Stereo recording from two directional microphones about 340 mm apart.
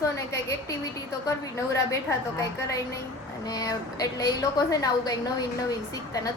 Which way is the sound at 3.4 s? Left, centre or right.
Centre.